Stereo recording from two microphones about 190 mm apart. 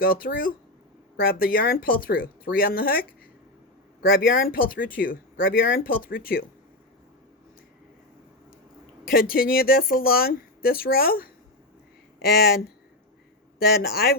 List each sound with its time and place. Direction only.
0.0 s speech: 50° left (ahead or behind)
9.0 s speech: 50° left (ahead or behind)